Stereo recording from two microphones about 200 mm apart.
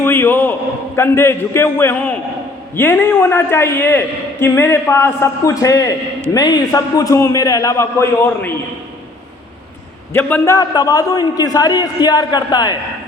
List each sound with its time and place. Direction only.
0.0 s a sound: 10° left (ahead or behind)
0.9 s a man's voice: 10° left (ahead or behind)
10.1 s a man's voice: 10° left (ahead or behind)